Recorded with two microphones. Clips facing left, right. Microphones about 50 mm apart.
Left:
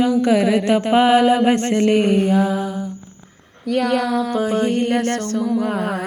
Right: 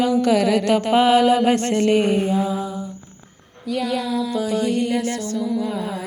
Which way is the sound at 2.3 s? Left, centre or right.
Left.